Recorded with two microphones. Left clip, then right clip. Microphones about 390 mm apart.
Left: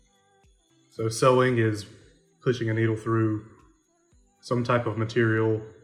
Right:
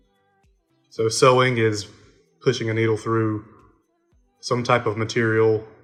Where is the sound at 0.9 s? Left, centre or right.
Centre.